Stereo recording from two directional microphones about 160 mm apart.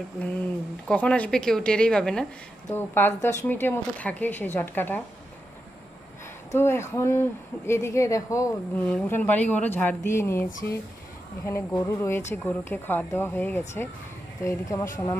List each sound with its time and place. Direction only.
0.8 s a woman's voice: 5° left (ahead or behind)
6.5 s a woman's voice: 15° left (ahead or behind)